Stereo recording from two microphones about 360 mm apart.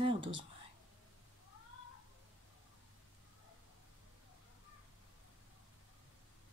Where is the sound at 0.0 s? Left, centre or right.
Centre.